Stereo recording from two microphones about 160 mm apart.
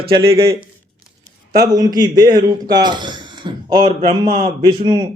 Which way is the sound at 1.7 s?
25° right (ahead or behind).